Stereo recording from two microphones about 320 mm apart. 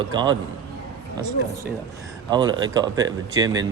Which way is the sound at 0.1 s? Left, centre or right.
Centre.